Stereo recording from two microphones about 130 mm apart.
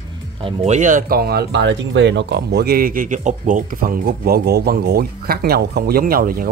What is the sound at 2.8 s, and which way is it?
Speech, 90° right.